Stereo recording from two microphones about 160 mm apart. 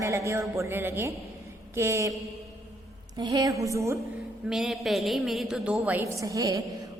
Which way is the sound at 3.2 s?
25° right (ahead or behind).